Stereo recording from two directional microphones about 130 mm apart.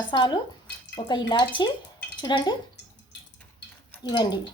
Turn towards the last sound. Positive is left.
turn(degrees=30)  # may be behind; listen again after turning